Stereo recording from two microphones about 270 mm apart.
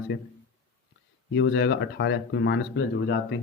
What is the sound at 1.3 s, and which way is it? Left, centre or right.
Speech, left.